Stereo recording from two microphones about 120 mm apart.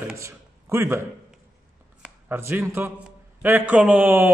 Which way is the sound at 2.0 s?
20° right (ahead or behind).